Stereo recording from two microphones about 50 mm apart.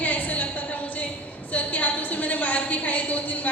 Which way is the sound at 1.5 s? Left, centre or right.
Left.